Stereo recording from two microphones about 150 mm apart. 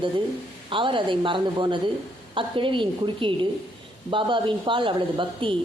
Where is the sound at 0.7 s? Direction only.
35° right (ahead or behind).